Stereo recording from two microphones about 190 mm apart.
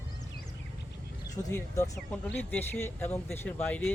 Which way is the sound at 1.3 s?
15° left (ahead or behind).